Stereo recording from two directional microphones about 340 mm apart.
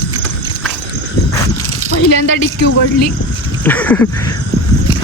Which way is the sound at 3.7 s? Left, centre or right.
Centre.